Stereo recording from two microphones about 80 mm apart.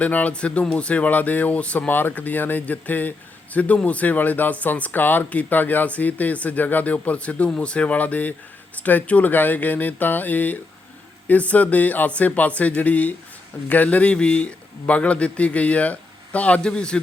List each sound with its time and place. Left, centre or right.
0.0 s a man's voice: centre